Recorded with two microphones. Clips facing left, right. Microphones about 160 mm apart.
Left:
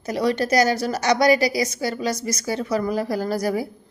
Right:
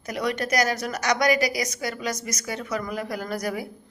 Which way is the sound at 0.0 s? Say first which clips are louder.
Left 5 dB; 30° left (ahead or behind).